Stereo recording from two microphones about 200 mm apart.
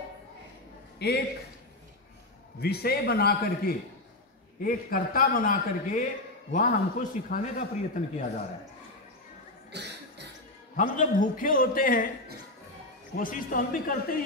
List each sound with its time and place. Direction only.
0.9 s a man's voice: 55° left (ahead or behind)
2.6 s a man's voice: 50° left (ahead or behind)
9.7 s cough: 55° right (ahead or behind)
10.8 s a man's voice: 40° left (ahead or behind)
13.1 s a man's voice: 45° left (ahead or behind)